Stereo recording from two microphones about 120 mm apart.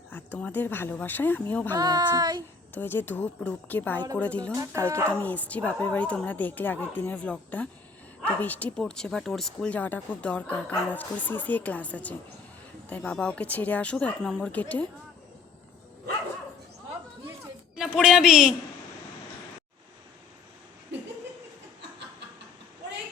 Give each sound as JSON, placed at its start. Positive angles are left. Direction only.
{"t": 0.3, "sound": "speech", "side_deg": 15}
{"t": 1.7, "sound": "speech", "side_deg": -35}
{"t": 2.7, "sound": "speech", "side_deg": 15}
{"t": 4.5, "sound": "speech", "side_deg": -20}
{"t": 5.2, "sound": "speech", "side_deg": 15}
{"t": 17.7, "sound": "a man's voice", "side_deg": -5}